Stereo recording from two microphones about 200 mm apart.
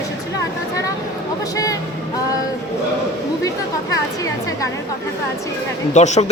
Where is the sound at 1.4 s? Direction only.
15° left (ahead or behind).